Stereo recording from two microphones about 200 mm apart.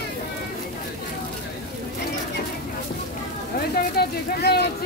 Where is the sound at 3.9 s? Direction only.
55° left (ahead or behind).